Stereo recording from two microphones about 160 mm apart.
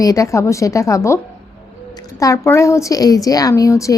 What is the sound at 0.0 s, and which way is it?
A woman's voice, 20° left (ahead or behind).